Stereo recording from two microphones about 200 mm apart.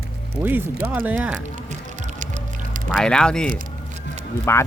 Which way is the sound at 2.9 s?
5° left (ahead or behind).